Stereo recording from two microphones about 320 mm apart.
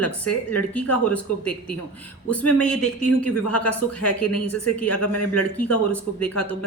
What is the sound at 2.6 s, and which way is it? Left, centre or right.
A woman's voice, centre.